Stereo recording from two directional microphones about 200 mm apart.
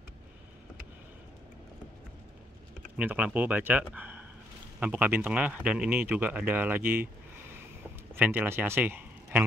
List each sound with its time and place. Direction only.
3.0 s speech: 5° right (ahead or behind)
8.1 s speech: 10° right (ahead or behind)